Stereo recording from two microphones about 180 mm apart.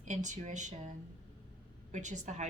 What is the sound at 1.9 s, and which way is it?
Speech, 40° right (ahead or behind).